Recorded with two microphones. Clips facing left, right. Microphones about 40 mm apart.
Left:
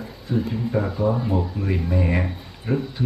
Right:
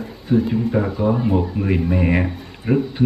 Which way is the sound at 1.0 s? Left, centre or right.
Right.